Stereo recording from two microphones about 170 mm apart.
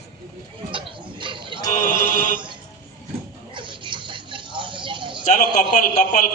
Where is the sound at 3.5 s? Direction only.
30° right (ahead or behind).